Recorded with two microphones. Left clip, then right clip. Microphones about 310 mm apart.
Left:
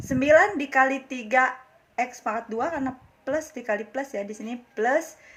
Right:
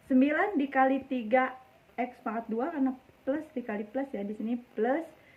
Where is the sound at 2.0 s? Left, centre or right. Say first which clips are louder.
Left 7 dB; right.